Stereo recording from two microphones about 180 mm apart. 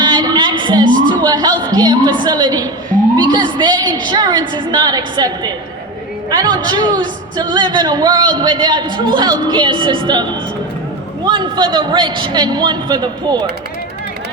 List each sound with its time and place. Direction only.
0.0 s a sound: 25° right (ahead or behind)
1.2 s a woman's voice: 20° right (ahead or behind)
11.3 s speech: 25° right (ahead or behind)